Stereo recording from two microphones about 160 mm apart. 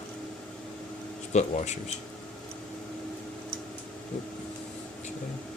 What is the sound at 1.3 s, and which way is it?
Speech, 45° left (ahead or behind).